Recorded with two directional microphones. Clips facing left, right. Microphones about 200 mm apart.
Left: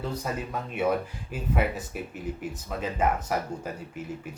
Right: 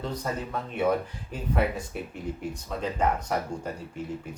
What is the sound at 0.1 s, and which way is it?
A man's voice, 10° left (ahead or behind).